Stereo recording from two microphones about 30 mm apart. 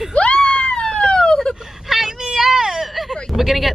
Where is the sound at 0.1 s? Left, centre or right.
Left.